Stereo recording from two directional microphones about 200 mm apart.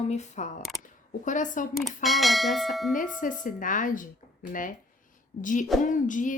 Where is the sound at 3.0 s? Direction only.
40° left (ahead or behind).